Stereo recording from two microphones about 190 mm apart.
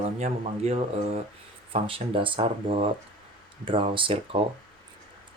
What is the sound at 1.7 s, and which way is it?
Speech, 30° right (ahead or behind).